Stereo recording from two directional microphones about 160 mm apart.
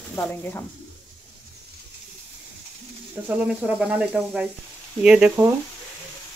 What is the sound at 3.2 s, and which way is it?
Speech, 10° right (ahead or behind).